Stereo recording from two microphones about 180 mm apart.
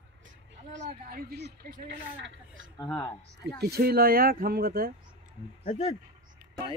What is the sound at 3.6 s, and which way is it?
Speech, 60° right (ahead or behind).